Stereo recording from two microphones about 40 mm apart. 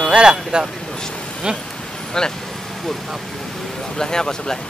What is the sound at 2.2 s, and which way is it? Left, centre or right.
Speech, centre.